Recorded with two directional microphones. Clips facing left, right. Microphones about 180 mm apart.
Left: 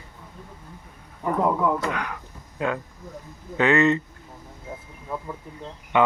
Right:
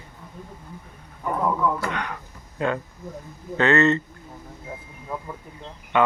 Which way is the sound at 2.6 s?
5° left (ahead or behind).